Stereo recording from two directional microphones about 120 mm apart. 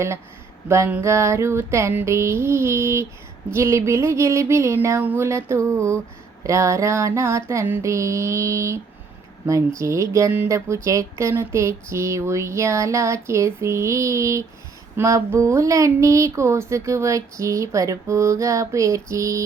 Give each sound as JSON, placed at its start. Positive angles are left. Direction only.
{"t": 0.9, "sound": "speech", "side_deg": -20}